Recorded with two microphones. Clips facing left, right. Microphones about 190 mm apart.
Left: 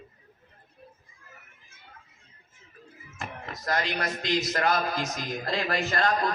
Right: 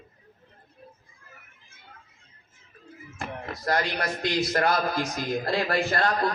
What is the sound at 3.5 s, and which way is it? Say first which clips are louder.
A man's voice: right 3 dB; 35° right (ahead or behind).